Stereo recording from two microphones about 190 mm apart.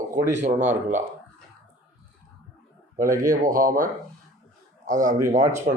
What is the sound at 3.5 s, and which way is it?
Speech, 45° right (ahead or behind).